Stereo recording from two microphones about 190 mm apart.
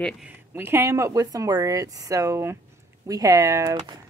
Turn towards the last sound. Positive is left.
turn(degrees=-15)  # may be behind; listen again after turning